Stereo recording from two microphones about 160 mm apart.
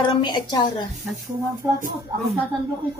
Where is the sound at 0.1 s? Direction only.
30° left (ahead or behind).